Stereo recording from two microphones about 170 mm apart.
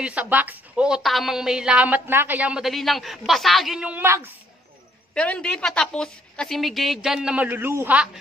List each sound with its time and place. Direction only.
0.0 s a woman's voice: 5° right (ahead or behind)
5.1 s a woman's voice: 5° left (ahead or behind); by 8.1 s 10° right (ahead or behind)